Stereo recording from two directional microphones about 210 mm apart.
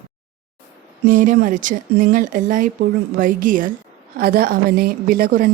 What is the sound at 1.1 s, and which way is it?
A woman's voice, 40° right (ahead or behind).